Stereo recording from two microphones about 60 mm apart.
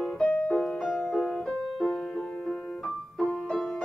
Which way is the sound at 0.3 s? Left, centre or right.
Left.